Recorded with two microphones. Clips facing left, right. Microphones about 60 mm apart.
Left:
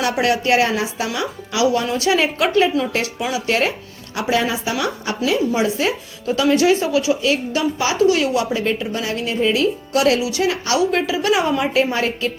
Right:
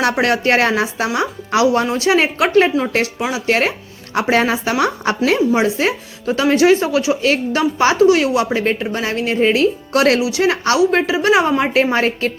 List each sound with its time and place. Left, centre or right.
0.0 s a woman's voice: right
2.0 s a woman's voice: right
2.5 s a woman's voice: right
5.5 s a woman's voice: right
7.2 s a woman's voice: right
10.2 s a woman's voice: right
10.5 s a woman's voice: right